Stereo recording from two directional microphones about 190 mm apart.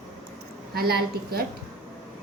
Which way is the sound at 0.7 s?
55° right (ahead or behind).